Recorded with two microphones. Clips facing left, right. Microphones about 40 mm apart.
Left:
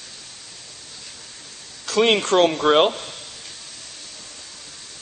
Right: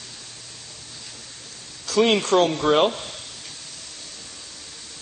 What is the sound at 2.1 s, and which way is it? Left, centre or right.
Speech, centre.